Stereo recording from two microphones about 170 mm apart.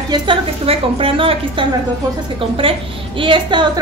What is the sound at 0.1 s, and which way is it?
A woman's voice, 30° right (ahead or behind).